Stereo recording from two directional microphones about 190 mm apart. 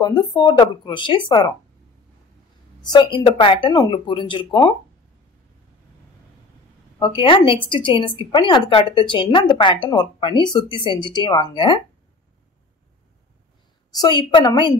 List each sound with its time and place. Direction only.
0.0 s a woman's voice: 25° left (ahead or behind)
2.8 s a woman's voice: 20° left (ahead or behind)
7.0 s a woman's voice: 25° left (ahead or behind)
13.9 s a woman's voice: 20° left (ahead or behind)